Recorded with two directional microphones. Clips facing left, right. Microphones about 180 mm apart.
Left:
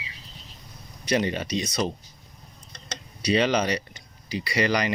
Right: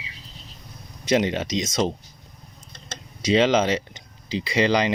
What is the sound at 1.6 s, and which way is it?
Speech, 90° right.